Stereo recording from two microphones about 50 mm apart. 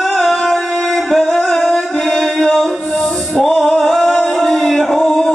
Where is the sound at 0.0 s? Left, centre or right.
Centre.